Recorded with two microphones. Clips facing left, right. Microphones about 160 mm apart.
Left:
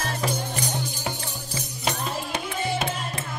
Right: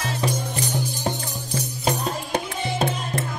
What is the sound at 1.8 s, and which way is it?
Music, 35° right (ahead or behind).